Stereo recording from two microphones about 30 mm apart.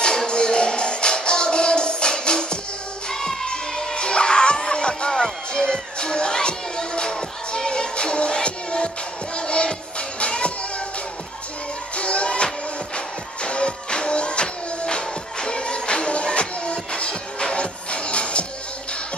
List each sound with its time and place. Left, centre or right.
0.0 s music: left
3.4 s music: left
11.9 s music: left